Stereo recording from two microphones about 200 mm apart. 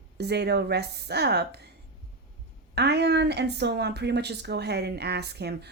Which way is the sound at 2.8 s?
55° right (ahead or behind).